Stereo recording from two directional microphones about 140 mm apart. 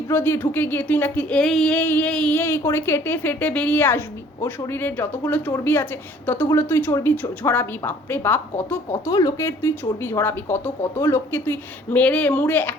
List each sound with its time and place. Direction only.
0.1 s speech: 15° left (ahead or behind)
9.0 s speech: 25° left (ahead or behind)